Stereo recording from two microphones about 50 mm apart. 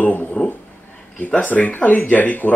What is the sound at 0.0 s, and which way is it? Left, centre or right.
Speech, left.